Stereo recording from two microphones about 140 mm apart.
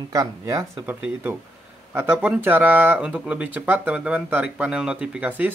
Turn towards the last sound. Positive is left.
turn(degrees=-10)  # may be behind; listen again after turning